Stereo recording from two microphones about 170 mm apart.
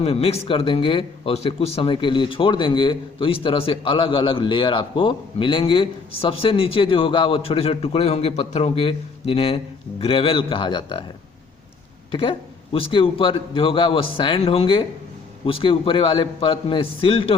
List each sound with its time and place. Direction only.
0.0 s a man's voice: 35° left (ahead or behind)
12.1 s a man's voice: 30° left (ahead or behind)